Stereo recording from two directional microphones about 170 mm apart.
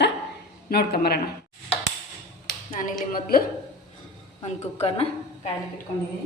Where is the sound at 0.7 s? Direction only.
65° left (ahead or behind).